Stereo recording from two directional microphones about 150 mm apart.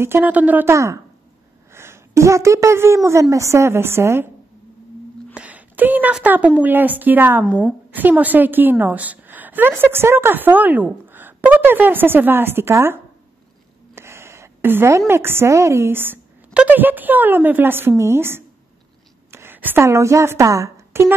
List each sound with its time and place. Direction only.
0.0 s a woman's voice: 15° right (ahead or behind)
5.3 s a sound: 10° right (ahead or behind)
6.6 s a woman's voice: 10° right (ahead or behind)
7.4 s a woman's voice: 10° left (ahead or behind)
7.9 s a woman's voice: 10° right (ahead or behind)